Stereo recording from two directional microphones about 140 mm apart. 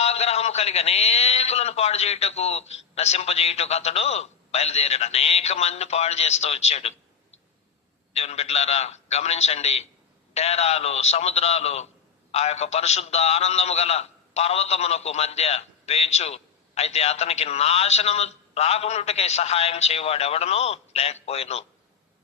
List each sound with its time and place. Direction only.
0.0 s a man's voice: 50° left (ahead or behind)
8.1 s a man's voice: 50° left (ahead or behind)